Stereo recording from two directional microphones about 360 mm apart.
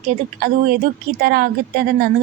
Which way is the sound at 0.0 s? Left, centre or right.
Right.